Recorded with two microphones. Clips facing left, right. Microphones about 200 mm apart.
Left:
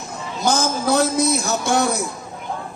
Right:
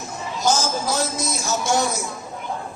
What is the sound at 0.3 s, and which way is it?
A man's voice, 60° left (ahead or behind).